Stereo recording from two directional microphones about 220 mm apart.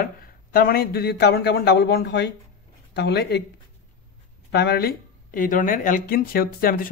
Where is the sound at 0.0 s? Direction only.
45° left (ahead or behind).